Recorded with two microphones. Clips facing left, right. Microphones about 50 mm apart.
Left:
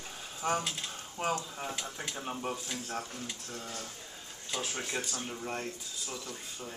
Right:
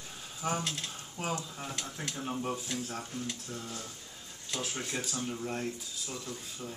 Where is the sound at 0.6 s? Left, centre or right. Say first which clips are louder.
Left 1 dB; centre.